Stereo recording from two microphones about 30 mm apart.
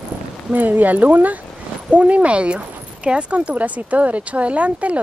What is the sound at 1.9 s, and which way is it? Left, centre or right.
Speech, right.